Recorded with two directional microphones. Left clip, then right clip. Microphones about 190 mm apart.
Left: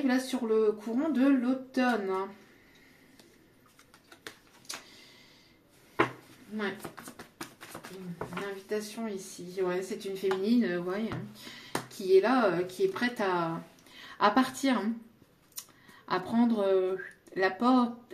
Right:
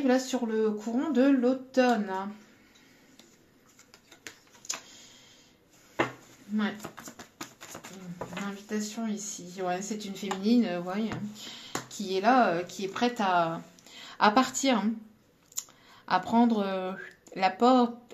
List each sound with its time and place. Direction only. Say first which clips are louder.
0.0 s speech: right 4 dB; 35° right (ahead or behind)
6.8 s a sound: right 1 dB; 20° right (ahead or behind)
8.6 s a woman's voice: right 1 dB; 40° right (ahead or behind)
16.1 s speech: right 4 dB; 40° right (ahead or behind)